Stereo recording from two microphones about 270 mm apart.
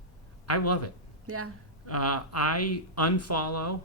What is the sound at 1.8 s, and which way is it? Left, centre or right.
Speech, left.